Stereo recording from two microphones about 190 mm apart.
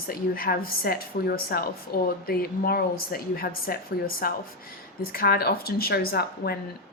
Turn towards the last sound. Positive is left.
turn(degrees=55)  # may be behind; listen again after turning